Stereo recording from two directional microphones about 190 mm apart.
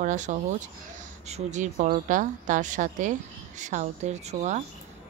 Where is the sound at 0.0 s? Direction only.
40° right (ahead or behind).